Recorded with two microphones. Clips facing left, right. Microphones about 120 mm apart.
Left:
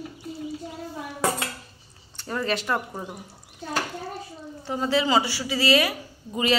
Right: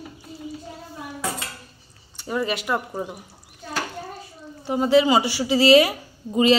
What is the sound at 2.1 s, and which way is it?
Speech, 10° right (ahead or behind).